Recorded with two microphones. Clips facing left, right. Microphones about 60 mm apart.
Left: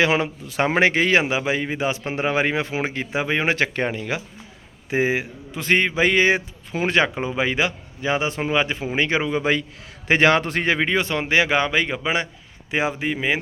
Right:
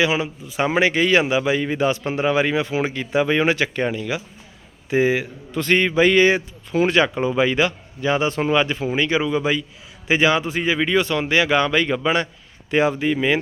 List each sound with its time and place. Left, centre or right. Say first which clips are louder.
0.0 s a man's voice: left 1 dB; left
3.5 s a man's voice: right 1 dB; left
7.1 s a man's voice: right 4 dB; centre
8.6 s a man's voice: right 2 dB; left
10.1 s a man's voice: left 1 dB; left
10.8 s a man's voice: right 2 dB; left